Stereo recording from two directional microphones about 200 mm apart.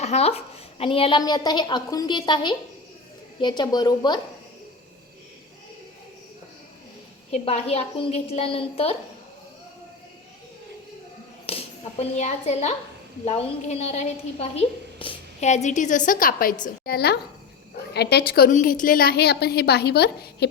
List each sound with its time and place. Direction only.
0.0 s a woman's voice: 30° left (ahead or behind)
7.3 s a woman's voice: 30° left (ahead or behind)
11.4 s a child's voice: 30° left (ahead or behind); by 20.5 s 55° left (ahead or behind)